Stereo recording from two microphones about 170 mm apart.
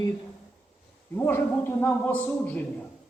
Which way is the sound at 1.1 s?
10° left (ahead or behind).